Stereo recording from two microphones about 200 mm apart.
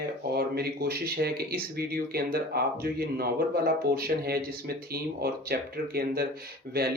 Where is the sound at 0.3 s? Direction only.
50° right (ahead or behind).